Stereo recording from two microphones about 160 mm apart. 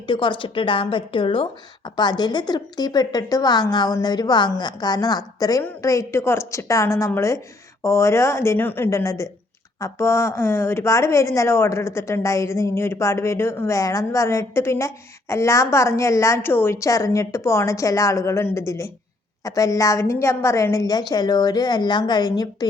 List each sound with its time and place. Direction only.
0.1 s a woman's voice: 30° left (ahead or behind)